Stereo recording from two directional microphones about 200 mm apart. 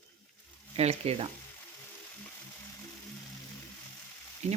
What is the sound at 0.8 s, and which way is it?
Speech, 30° right (ahead or behind).